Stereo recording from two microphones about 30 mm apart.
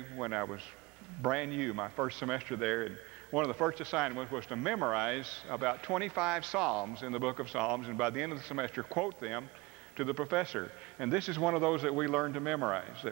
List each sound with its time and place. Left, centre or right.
0.2 s a man's voice: right